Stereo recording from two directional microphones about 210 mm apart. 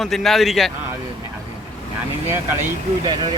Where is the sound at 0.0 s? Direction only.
Centre (ahead or behind).